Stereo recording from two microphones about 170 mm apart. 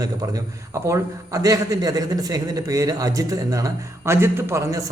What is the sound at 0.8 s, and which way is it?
A man's voice, 20° right (ahead or behind).